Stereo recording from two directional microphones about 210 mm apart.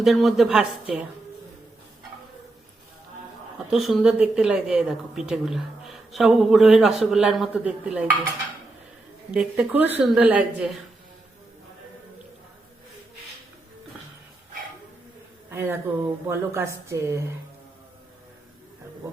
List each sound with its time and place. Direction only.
0.0 s a woman's voice: centre (ahead or behind)
3.7 s a woman's voice: centre (ahead or behind)
9.3 s a woman's voice: 5° right (ahead or behind)
15.4 s a sound: 10° right (ahead or behind)
16.2 s a woman's voice: 10° right (ahead or behind)